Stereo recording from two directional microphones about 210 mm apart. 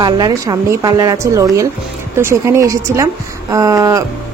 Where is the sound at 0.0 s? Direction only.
20° right (ahead or behind).